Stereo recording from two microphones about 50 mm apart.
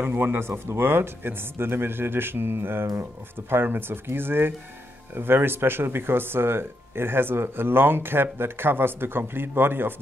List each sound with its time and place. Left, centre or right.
0.0 s speech: right